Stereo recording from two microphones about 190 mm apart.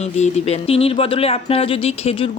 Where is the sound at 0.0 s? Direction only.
35° left (ahead or behind).